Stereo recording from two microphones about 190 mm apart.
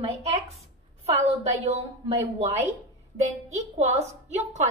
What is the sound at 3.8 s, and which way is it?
Speech, 35° right (ahead or behind).